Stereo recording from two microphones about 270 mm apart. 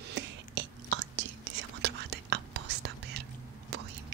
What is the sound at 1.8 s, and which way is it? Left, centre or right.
Whispering, right.